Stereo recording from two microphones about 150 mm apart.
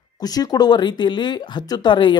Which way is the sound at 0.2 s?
25° left (ahead or behind).